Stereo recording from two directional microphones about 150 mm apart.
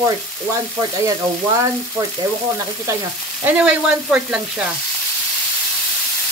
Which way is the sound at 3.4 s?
5° right (ahead or behind).